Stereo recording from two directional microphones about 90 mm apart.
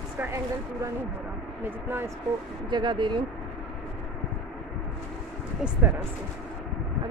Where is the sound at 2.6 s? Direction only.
60° right (ahead or behind).